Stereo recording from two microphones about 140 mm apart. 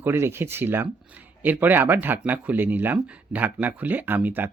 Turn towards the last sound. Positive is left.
turn(degrees=-15)  # may be behind; listen again after turning